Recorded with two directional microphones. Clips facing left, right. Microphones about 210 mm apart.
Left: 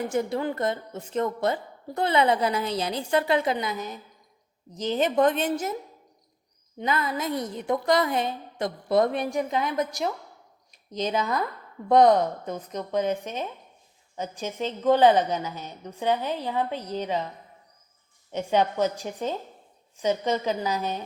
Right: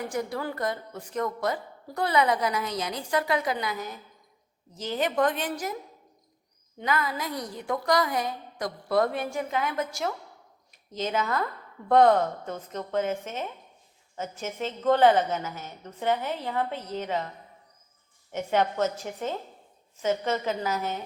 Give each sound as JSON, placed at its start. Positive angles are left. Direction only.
{"t": 0.1, "sound": "a woman's voice", "side_deg": 25}
{"t": 6.7, "sound": "a woman's voice", "side_deg": 25}
{"t": 18.3, "sound": "a woman's voice", "side_deg": 15}